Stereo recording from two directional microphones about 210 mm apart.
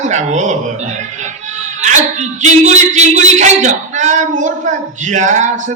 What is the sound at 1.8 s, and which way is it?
Speech, 35° right (ahead or behind).